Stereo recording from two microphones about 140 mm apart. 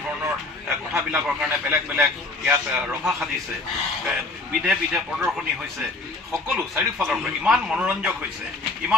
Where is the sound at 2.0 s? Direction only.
5° right (ahead or behind).